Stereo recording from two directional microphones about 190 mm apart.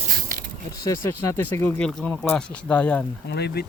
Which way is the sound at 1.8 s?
5° left (ahead or behind).